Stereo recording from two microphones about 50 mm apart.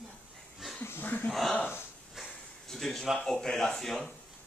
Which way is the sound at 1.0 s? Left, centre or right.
Left.